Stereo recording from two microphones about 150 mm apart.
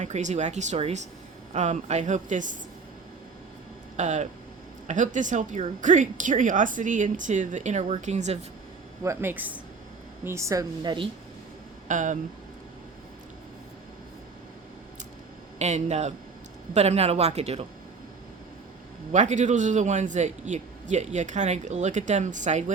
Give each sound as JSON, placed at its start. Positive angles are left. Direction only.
{"t": 0.0, "sound": "a man's voice", "side_deg": -55}
{"t": 3.9, "sound": "a man's voice", "side_deg": -50}
{"t": 9.0, "sound": "a woman's voice", "side_deg": -15}
{"t": 11.9, "sound": "speech", "side_deg": -55}
{"t": 15.5, "sound": "a man's voice", "side_deg": -50}
{"t": 19.1, "sound": "a man's voice", "side_deg": -55}